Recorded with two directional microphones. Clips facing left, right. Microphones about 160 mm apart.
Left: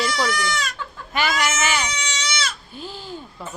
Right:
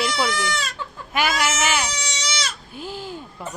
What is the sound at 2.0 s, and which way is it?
Goat, 35° right (ahead or behind).